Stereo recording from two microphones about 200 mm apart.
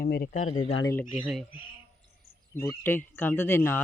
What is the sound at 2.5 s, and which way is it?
Speech, 10° left (ahead or behind).